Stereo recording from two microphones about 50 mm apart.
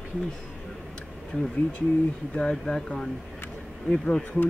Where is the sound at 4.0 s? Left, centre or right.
Centre.